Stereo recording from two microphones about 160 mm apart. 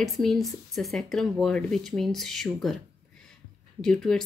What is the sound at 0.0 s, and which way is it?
Speech, centre (ahead or behind).